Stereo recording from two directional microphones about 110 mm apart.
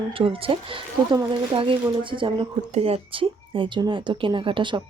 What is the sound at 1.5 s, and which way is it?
Speech, 50° right (ahead or behind).